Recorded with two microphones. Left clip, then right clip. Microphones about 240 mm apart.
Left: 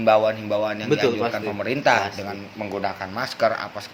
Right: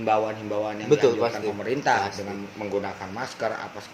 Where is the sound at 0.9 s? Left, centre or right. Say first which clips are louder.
Right 2 dB; centre.